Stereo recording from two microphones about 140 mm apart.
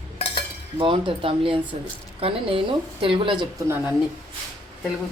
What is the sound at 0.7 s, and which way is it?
A woman's voice, 35° right (ahead or behind).